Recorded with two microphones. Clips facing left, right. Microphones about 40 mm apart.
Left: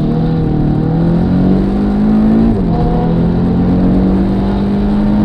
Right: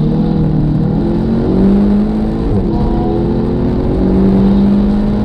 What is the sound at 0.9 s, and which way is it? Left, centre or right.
Vehicle, centre.